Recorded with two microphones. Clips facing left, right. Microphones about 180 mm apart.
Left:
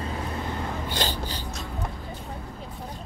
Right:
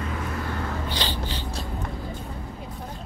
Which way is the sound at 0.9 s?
45° left (ahead or behind).